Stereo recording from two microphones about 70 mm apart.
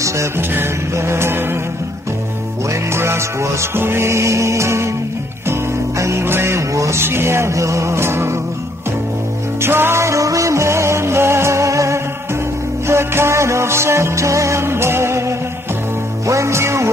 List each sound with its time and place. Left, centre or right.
0.4 s music: right
2.7 s music: right
5.5 s speech: right
9.6 s music: right